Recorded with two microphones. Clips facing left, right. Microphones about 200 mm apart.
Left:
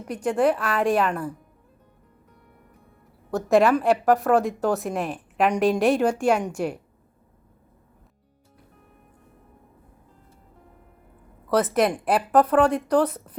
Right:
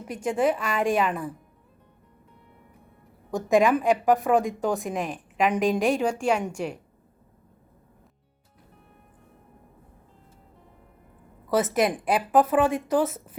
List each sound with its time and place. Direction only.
0.1 s speech: centre (ahead or behind)
3.3 s a woman's voice: 15° right (ahead or behind)
4.1 s a woman's voice: centre (ahead or behind)
11.5 s speech: centre (ahead or behind)